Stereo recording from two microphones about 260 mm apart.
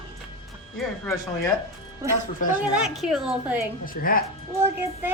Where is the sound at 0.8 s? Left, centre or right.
Centre.